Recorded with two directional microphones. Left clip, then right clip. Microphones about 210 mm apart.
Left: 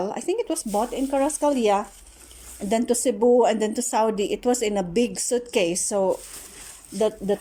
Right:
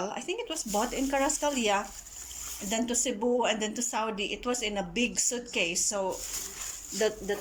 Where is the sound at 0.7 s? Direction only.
15° left (ahead or behind); by 6.1 s 30° left (ahead or behind).